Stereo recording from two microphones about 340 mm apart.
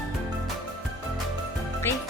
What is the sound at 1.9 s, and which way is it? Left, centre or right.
Music, centre.